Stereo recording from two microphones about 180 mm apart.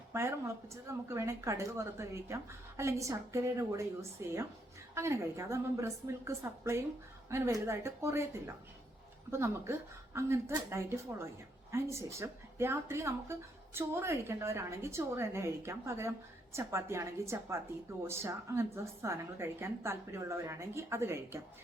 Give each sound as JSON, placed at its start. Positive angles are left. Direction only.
{"t": 0.1, "sound": "a woman's voice", "side_deg": -15}